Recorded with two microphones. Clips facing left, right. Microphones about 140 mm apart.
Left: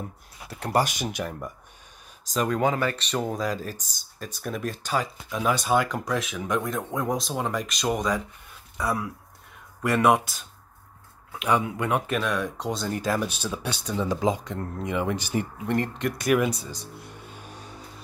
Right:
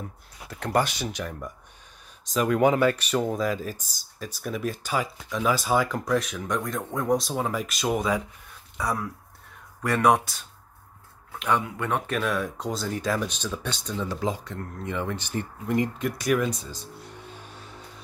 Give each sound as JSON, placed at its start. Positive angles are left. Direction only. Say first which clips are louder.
{"t": 0.5, "sound": "speech", "louder": "even", "side_deg": 10}
{"t": 2.2, "sound": "speech", "louder": "right 2 dB", "side_deg": -5}
{"t": 2.6, "sound": "speech", "louder": "right 6 dB", "side_deg": -15}
{"t": 3.0, "sound": "speech", "louder": "right 2 dB", "side_deg": -5}
{"t": 12.1, "sound": "speech", "louder": "even", "side_deg": 0}
{"t": 15.6, "sound": "speech", "louder": "right 4 dB", "side_deg": -5}